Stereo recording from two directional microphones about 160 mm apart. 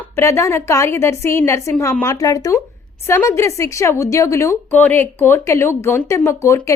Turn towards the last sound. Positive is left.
turn(degrees=20)  # may be behind; listen again after turning